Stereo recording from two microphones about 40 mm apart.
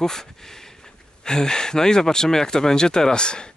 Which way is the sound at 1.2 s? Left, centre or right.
Centre.